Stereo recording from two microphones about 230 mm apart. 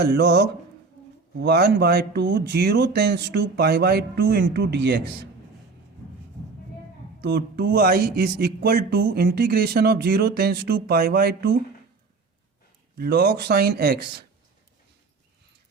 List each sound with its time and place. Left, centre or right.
0.0 s speech: right
7.2 s speech: right
13.0 s speech: right